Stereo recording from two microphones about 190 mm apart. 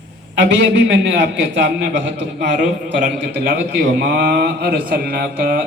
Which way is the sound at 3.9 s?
65° right (ahead or behind).